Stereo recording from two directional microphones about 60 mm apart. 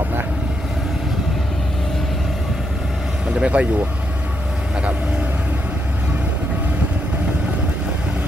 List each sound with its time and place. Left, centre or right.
3.3 s speech: centre